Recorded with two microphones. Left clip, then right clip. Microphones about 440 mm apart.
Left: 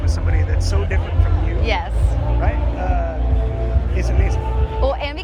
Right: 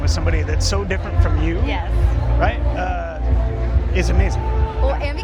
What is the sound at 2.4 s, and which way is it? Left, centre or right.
Speech, right.